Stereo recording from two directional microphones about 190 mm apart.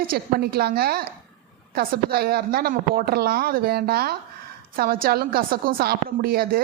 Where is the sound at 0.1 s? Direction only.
55° right (ahead or behind).